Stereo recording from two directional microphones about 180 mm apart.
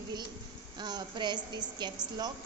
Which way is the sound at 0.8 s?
25° right (ahead or behind).